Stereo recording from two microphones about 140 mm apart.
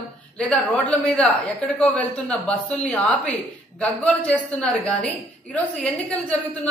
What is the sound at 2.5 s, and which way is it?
A woman's voice, 5° left (ahead or behind).